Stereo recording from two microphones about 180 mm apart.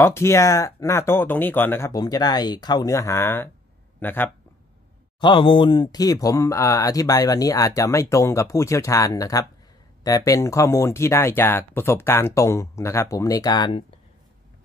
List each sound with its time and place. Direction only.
0.0 s a man's voice: 15° left (ahead or behind)
5.2 s speech: 30° left (ahead or behind)